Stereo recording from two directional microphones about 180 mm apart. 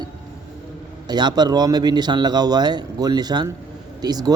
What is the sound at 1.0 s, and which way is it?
A man's voice, 25° right (ahead or behind).